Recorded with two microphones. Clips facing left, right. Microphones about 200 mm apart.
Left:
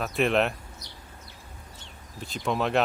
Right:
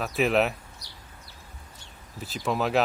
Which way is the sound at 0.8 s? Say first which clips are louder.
Left 3 dB; 20° left (ahead or behind).